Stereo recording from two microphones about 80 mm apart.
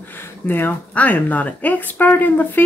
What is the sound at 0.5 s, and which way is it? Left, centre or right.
Speech, left.